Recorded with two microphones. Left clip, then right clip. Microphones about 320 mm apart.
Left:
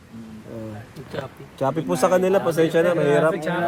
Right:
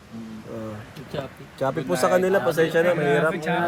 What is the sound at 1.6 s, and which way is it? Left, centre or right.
Speech, left.